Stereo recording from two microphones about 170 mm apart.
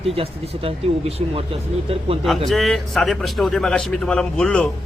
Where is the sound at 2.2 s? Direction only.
Centre (ahead or behind).